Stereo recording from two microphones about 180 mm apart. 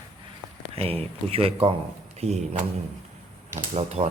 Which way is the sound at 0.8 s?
35° right (ahead or behind).